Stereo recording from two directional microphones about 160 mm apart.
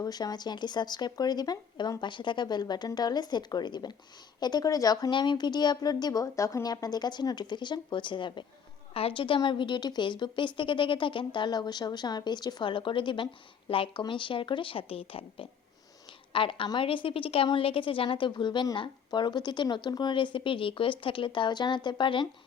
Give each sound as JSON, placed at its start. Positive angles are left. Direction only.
{"t": 0.0, "sound": "a woman's voice", "side_deg": 25}